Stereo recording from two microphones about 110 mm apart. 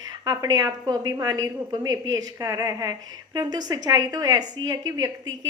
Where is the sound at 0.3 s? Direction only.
40° right (ahead or behind).